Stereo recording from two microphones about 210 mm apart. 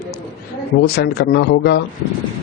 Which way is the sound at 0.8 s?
50° left (ahead or behind).